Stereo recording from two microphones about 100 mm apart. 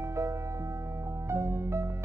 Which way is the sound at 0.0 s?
30° right (ahead or behind).